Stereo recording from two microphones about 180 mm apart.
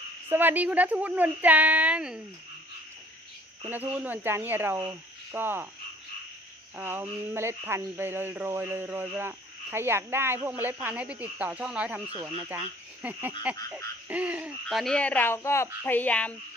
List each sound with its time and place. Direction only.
0.3 s speech: 10° right (ahead or behind)
3.7 s speech: 10° right (ahead or behind)
6.7 s speech: 10° right (ahead or behind); by 16.3 s 5° left (ahead or behind)